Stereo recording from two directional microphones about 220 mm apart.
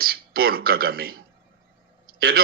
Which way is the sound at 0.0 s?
45° right (ahead or behind).